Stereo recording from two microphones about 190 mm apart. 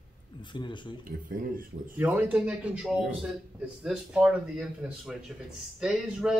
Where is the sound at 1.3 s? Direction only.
45° right (ahead or behind).